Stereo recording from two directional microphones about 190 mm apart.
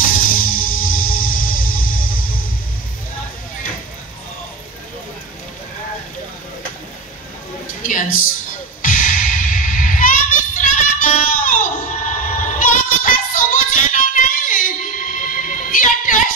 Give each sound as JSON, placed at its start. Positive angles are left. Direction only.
{"t": 0.4, "sound": "music", "side_deg": 45}
{"t": 7.8, "sound": "a sound", "side_deg": 45}
{"t": 8.8, "sound": "music", "side_deg": 45}